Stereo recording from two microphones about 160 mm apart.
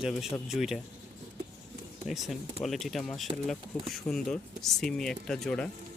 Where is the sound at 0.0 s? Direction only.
Centre (ahead or behind).